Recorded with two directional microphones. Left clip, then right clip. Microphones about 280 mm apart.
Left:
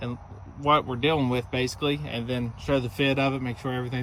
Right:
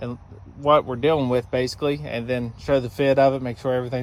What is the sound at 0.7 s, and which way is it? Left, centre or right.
Speech, left.